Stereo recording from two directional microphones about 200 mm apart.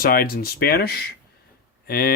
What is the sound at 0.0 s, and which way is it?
Speech, 50° left (ahead or behind).